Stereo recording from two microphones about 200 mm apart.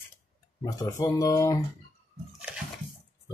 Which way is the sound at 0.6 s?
20° left (ahead or behind).